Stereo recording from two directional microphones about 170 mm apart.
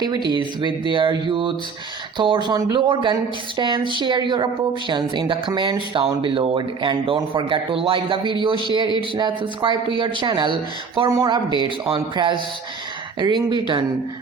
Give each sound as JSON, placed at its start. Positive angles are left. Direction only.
{"t": 0.0, "sound": "speech", "side_deg": -25}